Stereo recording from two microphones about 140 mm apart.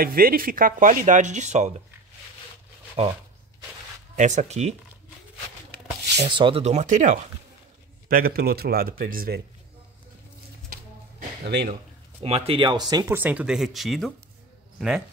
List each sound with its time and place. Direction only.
0.0 s speech: 90° right; by 1.8 s 55° right (ahead or behind)
3.0 s speech: 45° right (ahead or behind)
4.2 s speech: 55° right (ahead or behind)
6.2 s speech: 35° right (ahead or behind)
6.6 s speech: 55° right (ahead or behind)
8.1 s speech: 90° right
12.2 s speech: 45° right (ahead or behind); by 13.0 s 30° right (ahead or behind)
13.0 s speech: 15° right (ahead or behind)